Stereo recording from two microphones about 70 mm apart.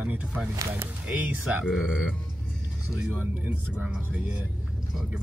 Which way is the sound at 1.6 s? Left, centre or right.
Centre.